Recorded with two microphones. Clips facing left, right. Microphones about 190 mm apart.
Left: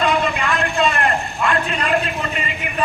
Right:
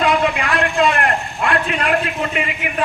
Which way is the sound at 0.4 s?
80° right.